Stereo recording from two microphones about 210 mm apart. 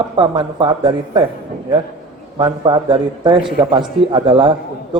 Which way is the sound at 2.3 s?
20° right (ahead or behind).